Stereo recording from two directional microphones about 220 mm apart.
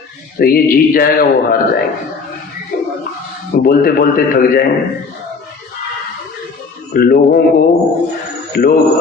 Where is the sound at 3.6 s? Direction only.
40° left (ahead or behind).